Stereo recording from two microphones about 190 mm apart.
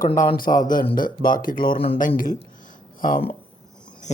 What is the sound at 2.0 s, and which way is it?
Speech, 45° left (ahead or behind).